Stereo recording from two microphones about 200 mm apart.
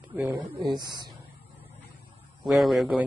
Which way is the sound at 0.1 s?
10° right (ahead or behind).